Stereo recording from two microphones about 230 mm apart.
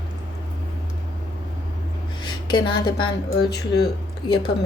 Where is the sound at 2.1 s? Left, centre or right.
Centre.